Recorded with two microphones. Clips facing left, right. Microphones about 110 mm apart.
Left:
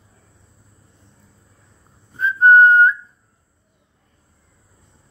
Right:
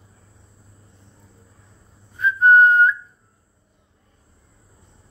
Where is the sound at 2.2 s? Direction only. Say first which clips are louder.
Left 2 dB; 35° left (ahead or behind).